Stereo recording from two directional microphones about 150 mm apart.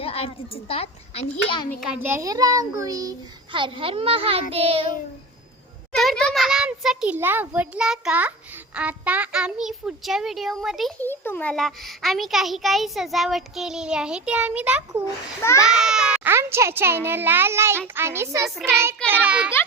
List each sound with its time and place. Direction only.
0.0 s a child's voice: 40° left (ahead or behind)
1.8 s a child's voice: 10° right (ahead or behind); by 4.9 s 40° right (ahead or behind)
5.9 s a child's voice: centre (ahead or behind)
11.0 s a child's voice: 15° left (ahead or behind); by 14.8 s 10° right (ahead or behind)
15.0 s a child's voice: 20° left (ahead or behind)
15.6 s a child's voice: 5° right (ahead or behind)
16.3 s a child's voice: 15° right (ahead or behind)